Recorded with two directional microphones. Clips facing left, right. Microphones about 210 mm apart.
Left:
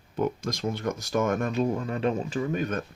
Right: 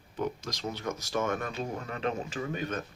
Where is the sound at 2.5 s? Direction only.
45° left (ahead or behind).